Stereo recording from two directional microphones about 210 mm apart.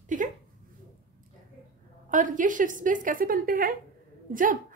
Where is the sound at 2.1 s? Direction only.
40° right (ahead or behind).